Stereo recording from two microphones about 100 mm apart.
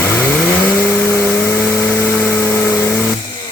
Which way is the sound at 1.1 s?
25° left (ahead or behind).